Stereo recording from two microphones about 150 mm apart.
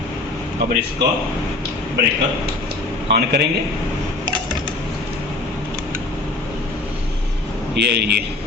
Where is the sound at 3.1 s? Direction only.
90° right.